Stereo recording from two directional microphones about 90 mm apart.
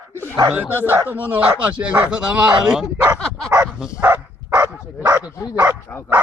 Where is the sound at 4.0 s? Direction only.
25° right (ahead or behind).